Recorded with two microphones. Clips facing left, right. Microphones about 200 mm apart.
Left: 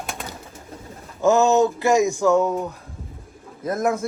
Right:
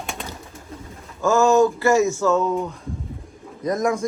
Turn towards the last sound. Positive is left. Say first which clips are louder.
# right 1 dB
turn(degrees=5)  # may be behind; listen again after turning